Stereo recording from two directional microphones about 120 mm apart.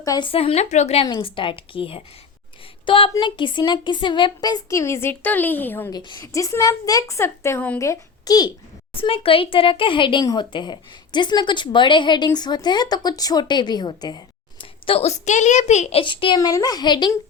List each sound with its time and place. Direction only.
0.0 s speech: 30° left (ahead or behind)
0.3 s speech: 55° left (ahead or behind)
1.2 s a woman's voice: 45° left (ahead or behind); by 5.9 s 15° left (ahead or behind)
5.9 s a woman's voice: 40° left (ahead or behind)
6.2 s a woman's voice: 25° left (ahead or behind)
9.0 s a woman's voice: 50° left (ahead or behind)
14.6 s a woman's voice: 50° left (ahead or behind); by 16.0 s 70° left (ahead or behind)
16.0 s a woman's voice: 45° left (ahead or behind)